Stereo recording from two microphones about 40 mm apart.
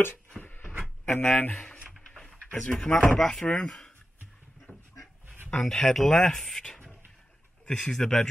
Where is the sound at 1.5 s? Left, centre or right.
Left.